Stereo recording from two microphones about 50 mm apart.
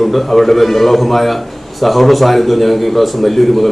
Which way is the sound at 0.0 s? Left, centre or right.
Centre.